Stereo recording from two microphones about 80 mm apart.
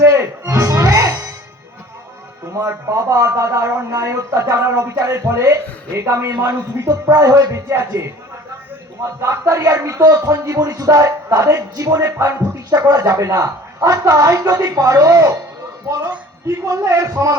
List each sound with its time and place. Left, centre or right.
0.0 s music: right
2.5 s speech: right
6.8 s a woman's voice: right
11.9 s speech: right
12.7 s a woman's voice: right
16.6 s a woman's voice: right